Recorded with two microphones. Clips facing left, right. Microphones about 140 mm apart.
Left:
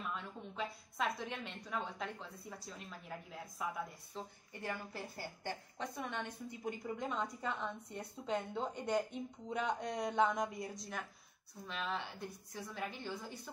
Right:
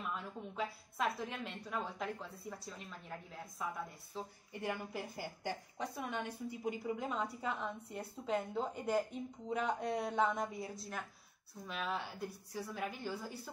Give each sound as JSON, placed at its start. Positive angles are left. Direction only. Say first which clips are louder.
{"t": 0.1, "sound": "a woman's voice", "louder": "right 1 dB", "side_deg": -5}